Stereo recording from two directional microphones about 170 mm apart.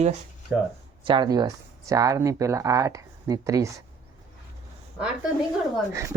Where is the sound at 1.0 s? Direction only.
30° right (ahead or behind).